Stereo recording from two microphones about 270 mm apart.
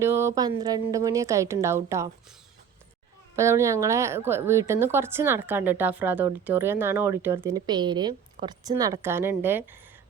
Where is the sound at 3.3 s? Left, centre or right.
Centre.